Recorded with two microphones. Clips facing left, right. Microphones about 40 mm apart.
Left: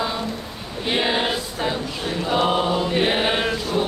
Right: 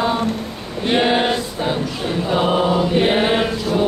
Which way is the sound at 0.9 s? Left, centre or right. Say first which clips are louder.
Right 5 dB; right.